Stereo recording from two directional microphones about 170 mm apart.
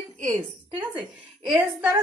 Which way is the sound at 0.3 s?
10° right (ahead or behind).